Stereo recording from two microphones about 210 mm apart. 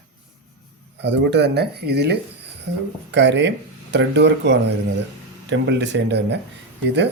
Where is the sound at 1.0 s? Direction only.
55° right (ahead or behind).